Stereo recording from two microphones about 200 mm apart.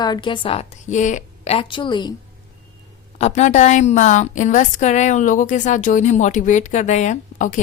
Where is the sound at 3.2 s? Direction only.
35° left (ahead or behind).